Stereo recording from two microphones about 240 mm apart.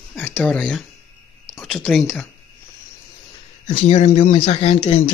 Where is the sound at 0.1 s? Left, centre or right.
Centre.